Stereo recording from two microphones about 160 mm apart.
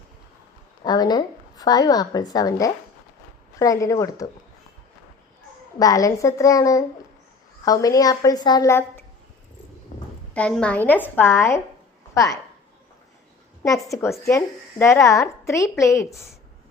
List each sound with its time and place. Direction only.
0.9 s a woman's voice: 25° left (ahead or behind)
5.8 s a woman's voice: 20° left (ahead or behind)
9.9 s a sound: 45° left (ahead or behind)
10.3 s a woman's voice: 5° left (ahead or behind)
13.6 s a woman's voice: 20° left (ahead or behind)